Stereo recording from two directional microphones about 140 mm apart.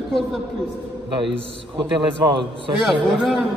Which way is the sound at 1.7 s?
35° right (ahead or behind).